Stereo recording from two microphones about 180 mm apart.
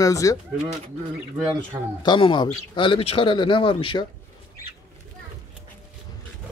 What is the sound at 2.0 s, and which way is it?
Speech, 25° left (ahead or behind).